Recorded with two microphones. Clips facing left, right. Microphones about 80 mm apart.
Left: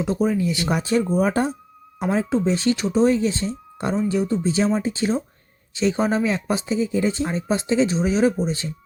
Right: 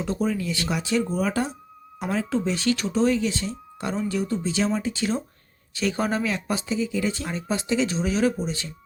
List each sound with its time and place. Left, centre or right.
0.0 s speech: centre
0.7 s speech: left